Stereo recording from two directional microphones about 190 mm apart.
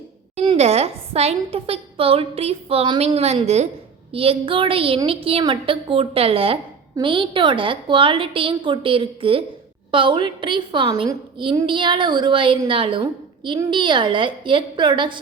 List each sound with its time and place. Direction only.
0.4 s a woman's voice: 35° right (ahead or behind)